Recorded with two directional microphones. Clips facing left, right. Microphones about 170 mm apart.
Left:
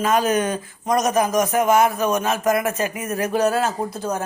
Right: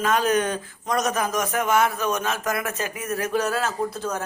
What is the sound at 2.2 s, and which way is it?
Speech, 20° left (ahead or behind).